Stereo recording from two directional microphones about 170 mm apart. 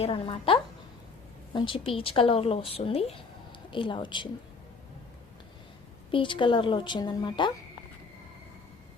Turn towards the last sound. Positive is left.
turn(degrees=25)  # may be behind; listen again after turning